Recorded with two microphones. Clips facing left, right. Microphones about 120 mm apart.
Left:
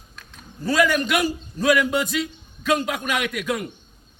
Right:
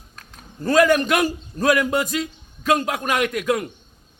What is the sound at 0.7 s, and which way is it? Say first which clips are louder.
A man's voice: right 4 dB; 50° right (ahead or behind).